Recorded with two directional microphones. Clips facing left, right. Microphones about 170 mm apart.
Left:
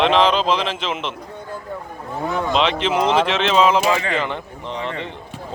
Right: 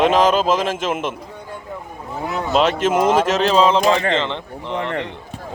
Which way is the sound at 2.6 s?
45° right (ahead or behind).